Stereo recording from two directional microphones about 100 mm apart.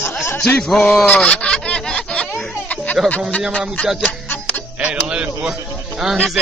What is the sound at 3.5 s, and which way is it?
Speech, 10° left (ahead or behind).